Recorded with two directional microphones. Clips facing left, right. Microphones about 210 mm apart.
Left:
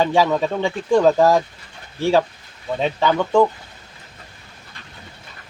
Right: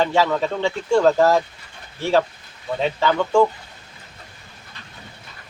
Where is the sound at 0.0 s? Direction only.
15° left (ahead or behind).